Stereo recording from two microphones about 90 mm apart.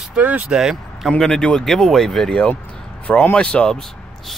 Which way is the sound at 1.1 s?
10° left (ahead or behind).